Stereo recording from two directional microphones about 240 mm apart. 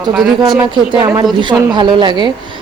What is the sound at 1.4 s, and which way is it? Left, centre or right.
Speech, centre.